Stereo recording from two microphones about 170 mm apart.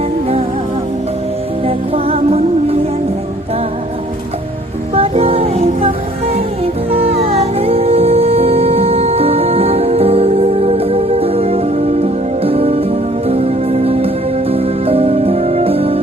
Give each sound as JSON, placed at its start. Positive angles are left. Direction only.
{"t": 1.6, "sound": "music", "side_deg": -35}
{"t": 4.9, "sound": "music", "side_deg": -35}
{"t": 6.9, "sound": "music", "side_deg": -35}